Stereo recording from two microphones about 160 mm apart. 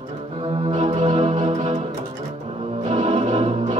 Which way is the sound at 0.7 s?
45° right (ahead or behind).